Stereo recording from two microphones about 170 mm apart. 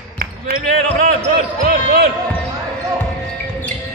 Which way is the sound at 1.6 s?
65° right (ahead or behind).